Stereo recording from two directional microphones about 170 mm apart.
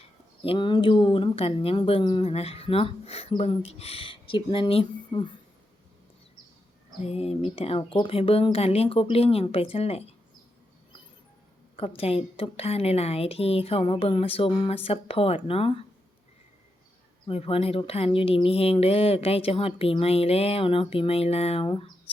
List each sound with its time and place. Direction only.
0.4 s a woman's voice: 30° left (ahead or behind)
7.0 s a woman's voice: 35° left (ahead or behind)
11.8 s a woman's voice: 35° left (ahead or behind)
17.2 s a woman's voice: 35° left (ahead or behind)